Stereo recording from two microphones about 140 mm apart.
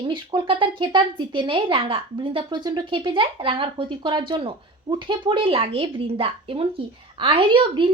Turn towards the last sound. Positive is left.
turn(degrees=-35)  # may be behind; listen again after turning